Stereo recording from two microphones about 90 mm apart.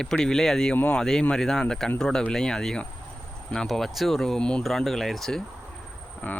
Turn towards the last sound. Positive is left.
turn(degrees=20)  # may be behind; listen again after turning